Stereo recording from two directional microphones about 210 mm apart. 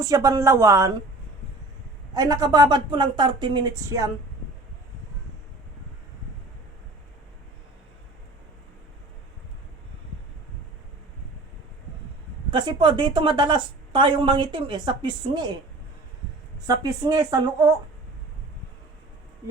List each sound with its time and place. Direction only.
0.0 s speech: 15° right (ahead or behind)
2.1 s a woman's voice: 15° right (ahead or behind)
12.5 s a woman's voice: 20° right (ahead or behind)
16.6 s speech: 15° right (ahead or behind)